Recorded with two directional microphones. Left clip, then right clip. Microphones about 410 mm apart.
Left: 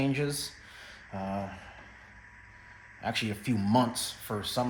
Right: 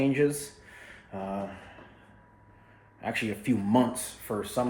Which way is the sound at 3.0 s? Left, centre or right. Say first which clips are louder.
Right 2 dB; centre.